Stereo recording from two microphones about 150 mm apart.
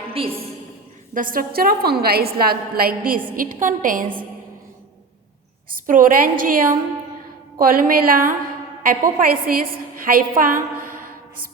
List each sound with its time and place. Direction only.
0.1 s a woman's voice: 40° right (ahead or behind)
1.1 s a woman's voice: 65° right (ahead or behind)
5.7 s a woman's voice: 65° right (ahead or behind)